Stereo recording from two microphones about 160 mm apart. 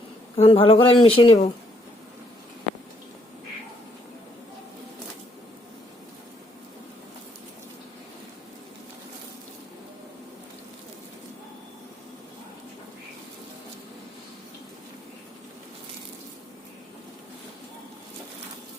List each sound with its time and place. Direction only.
0.3 s a man's voice: 35° left (ahead or behind)